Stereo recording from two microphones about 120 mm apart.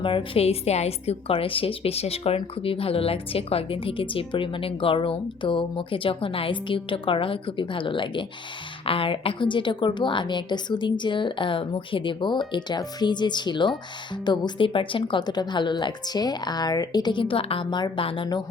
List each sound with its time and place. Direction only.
0.0 s a woman's voice: 45° left (ahead or behind)